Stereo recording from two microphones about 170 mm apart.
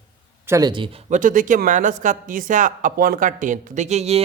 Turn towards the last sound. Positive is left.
turn(degrees=-40)  # may be behind; listen again after turning